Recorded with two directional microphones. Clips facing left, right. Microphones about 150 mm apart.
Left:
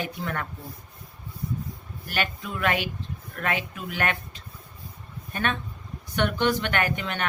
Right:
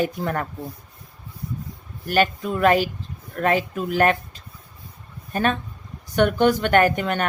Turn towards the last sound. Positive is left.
turn(degrees=-45)  # may be behind; listen again after turning